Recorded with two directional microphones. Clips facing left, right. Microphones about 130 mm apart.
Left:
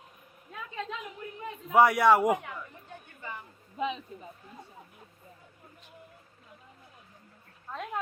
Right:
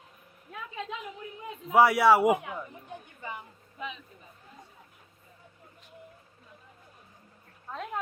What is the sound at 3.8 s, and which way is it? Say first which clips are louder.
Speech: left 8 dB; 25° left (ahead or behind).